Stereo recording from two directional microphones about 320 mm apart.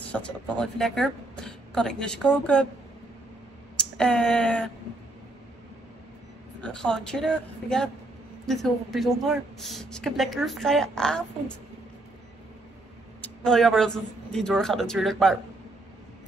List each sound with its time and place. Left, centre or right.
0.0 s a woman's voice: centre
4.0 s a woman's voice: centre
6.6 s a woman's voice: centre
13.2 s a woman's voice: centre